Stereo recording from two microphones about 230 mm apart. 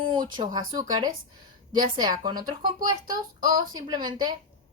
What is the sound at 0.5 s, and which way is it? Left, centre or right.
Speech, centre.